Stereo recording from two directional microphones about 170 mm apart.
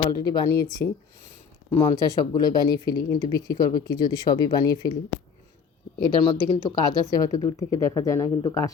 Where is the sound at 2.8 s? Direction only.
60° left (ahead or behind).